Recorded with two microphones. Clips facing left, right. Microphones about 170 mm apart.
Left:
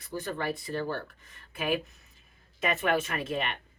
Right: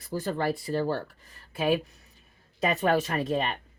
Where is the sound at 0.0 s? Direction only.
35° right (ahead or behind).